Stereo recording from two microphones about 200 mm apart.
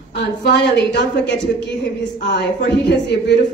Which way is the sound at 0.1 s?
55° left (ahead or behind).